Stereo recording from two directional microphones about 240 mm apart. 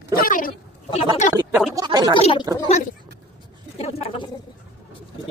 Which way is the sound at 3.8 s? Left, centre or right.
Left.